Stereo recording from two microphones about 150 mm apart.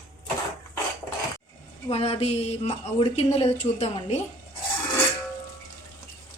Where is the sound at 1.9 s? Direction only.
40° left (ahead or behind).